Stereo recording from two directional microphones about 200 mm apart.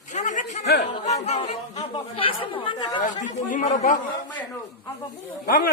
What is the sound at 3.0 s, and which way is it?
Speech, 40° left (ahead or behind).